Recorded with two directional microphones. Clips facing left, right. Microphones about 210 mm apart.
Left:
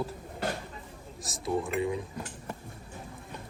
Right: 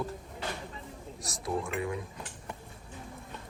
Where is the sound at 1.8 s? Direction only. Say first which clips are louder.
Left 4 dB; 25° left (ahead or behind).